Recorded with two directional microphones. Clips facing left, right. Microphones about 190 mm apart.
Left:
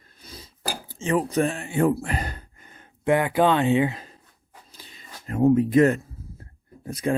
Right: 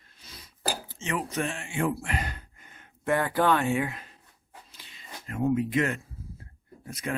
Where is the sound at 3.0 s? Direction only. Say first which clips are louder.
Left 5 dB; 15° left (ahead or behind).